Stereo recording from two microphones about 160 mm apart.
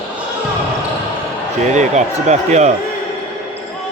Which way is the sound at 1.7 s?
45° right (ahead or behind).